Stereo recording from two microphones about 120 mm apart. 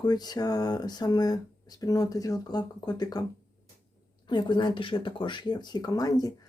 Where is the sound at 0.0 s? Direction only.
35° left (ahead or behind).